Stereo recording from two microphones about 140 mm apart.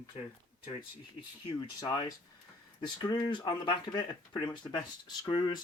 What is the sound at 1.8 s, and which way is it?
Speech, 30° left (ahead or behind).